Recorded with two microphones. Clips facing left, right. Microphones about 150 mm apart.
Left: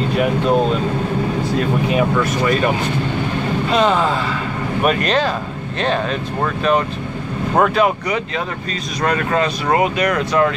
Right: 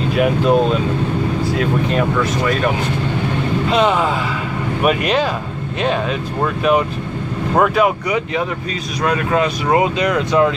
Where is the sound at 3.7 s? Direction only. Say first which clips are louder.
Even; 10° right (ahead or behind).